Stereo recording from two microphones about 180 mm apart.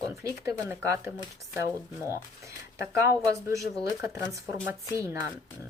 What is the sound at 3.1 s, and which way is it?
A woman's voice, 15° right (ahead or behind).